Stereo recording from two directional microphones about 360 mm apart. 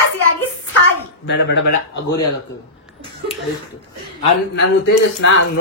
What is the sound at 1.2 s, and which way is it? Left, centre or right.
Speech, left.